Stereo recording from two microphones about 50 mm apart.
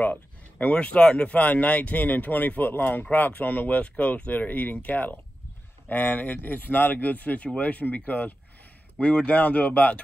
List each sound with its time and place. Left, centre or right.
0.0 s speech: left
8.9 s speech: left